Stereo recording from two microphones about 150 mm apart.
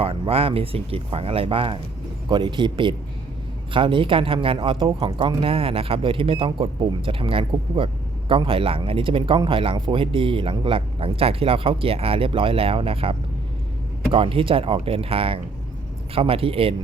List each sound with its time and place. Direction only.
0.0 s speech: 40° right (ahead or behind)